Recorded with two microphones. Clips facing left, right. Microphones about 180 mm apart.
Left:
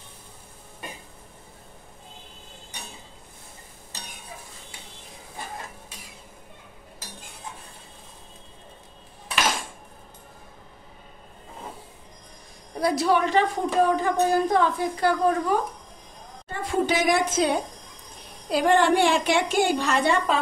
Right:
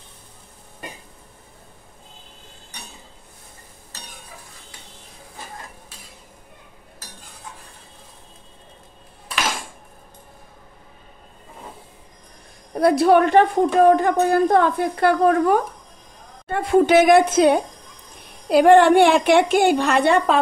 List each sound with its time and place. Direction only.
12.7 s a woman's voice: 55° right (ahead or behind)